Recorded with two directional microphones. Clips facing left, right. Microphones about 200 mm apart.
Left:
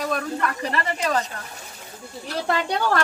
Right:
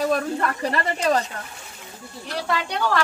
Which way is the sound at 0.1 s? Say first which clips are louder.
Right 3 dB; 35° right (ahead or behind).